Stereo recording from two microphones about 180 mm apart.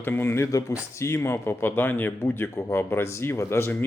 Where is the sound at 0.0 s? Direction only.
10° left (ahead or behind).